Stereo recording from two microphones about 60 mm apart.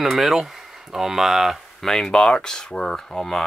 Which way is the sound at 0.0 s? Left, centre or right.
Centre.